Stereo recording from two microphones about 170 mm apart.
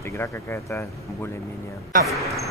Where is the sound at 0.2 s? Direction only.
15° left (ahead or behind).